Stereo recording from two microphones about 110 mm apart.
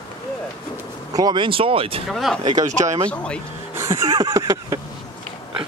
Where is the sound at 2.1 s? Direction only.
Centre (ahead or behind).